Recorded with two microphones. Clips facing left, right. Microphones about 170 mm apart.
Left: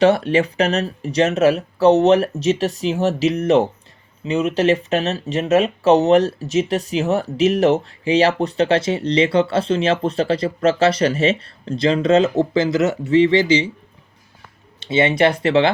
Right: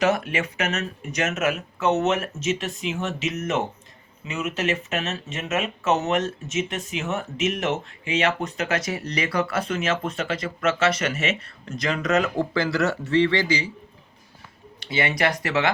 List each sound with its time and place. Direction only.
0.0 s speech: 30° left (ahead or behind)
14.8 s speech: 25° left (ahead or behind)